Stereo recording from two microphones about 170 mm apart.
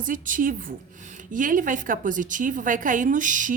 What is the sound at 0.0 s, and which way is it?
A woman's voice, 50° right (ahead or behind).